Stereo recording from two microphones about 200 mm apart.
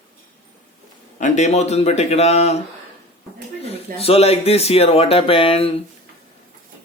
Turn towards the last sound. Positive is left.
turn(degrees=30)  # may be behind; listen again after turning